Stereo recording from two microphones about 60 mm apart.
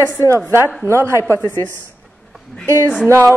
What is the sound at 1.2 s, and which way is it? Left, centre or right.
Speech, left.